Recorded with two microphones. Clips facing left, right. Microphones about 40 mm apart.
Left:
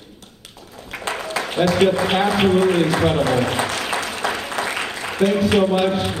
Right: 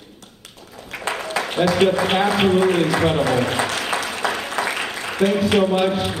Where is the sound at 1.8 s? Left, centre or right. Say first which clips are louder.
Even; centre.